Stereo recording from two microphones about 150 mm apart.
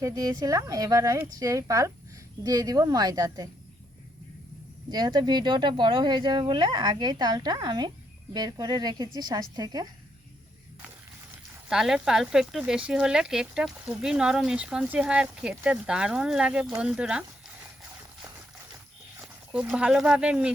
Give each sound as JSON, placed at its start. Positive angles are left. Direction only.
{"t": 0.0, "sound": "speech", "side_deg": -25}
{"t": 4.9, "sound": "speech", "side_deg": -30}
{"t": 11.7, "sound": "speech", "side_deg": -5}
{"t": 19.5, "sound": "speech", "side_deg": -5}